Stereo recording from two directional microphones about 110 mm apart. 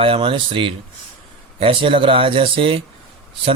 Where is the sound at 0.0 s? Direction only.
55° right (ahead or behind).